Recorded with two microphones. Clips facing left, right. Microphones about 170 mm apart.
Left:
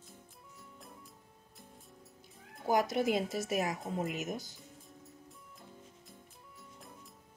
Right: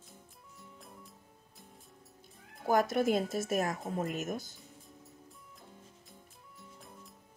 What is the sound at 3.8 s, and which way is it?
Speech, centre (ahead or behind).